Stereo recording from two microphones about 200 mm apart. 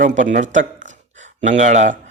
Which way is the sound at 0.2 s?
40° right (ahead or behind).